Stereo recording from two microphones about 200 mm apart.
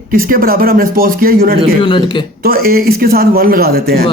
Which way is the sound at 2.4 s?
50° right (ahead or behind).